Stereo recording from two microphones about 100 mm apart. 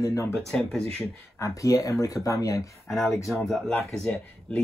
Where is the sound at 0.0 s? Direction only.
35° left (ahead or behind).